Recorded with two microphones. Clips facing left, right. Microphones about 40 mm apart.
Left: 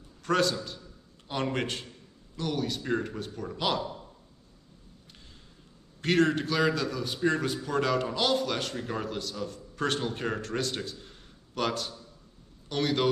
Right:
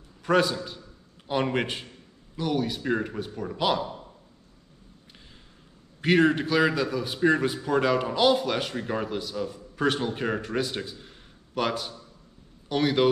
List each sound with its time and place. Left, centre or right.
0.2 s a man's voice: centre
5.9 s a man's voice: centre